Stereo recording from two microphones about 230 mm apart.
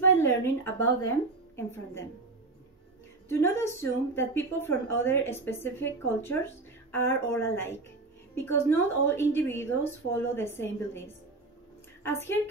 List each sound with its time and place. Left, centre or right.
0.2 s speech: centre
3.3 s a woman's voice: centre